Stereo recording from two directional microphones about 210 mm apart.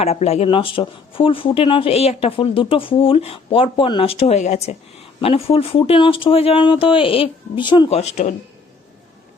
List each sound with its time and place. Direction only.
0.0 s speech: 30° left (ahead or behind)